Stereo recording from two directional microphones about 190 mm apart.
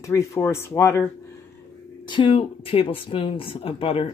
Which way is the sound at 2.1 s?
25° left (ahead or behind).